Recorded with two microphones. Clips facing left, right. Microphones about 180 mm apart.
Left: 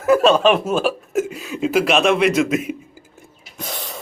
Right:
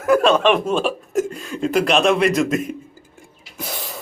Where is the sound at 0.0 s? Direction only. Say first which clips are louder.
Left 1 dB; 5° left (ahead or behind).